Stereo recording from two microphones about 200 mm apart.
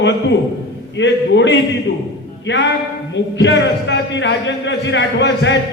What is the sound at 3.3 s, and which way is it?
Speech, 65° left (ahead or behind).